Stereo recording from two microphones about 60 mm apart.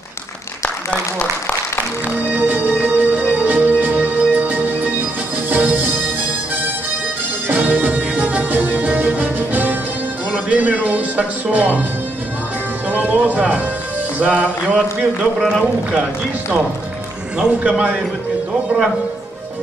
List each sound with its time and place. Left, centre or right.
2.2 s music: right
7.4 s music: right
10.3 s speech: right
12.9 s speech: right
15.3 s speech: centre
17.4 s speech: right